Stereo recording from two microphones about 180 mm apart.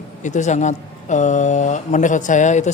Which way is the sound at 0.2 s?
40° left (ahead or behind).